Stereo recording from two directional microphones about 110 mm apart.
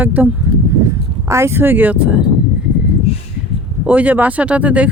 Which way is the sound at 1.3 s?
25° right (ahead or behind).